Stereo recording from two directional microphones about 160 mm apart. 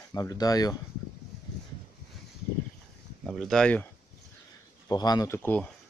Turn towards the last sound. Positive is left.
turn(degrees=10)  # may be behind; listen again after turning